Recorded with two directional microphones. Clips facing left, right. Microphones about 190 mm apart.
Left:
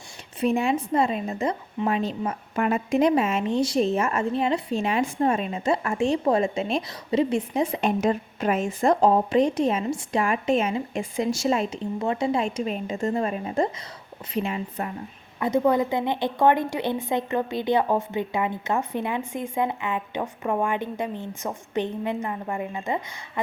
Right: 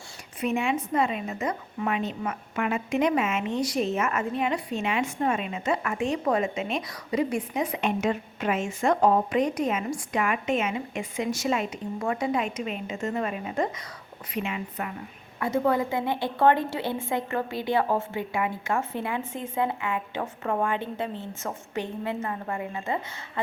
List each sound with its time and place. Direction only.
0.3 s a woman's voice: 35° left (ahead or behind)
15.4 s a woman's voice: 15° left (ahead or behind)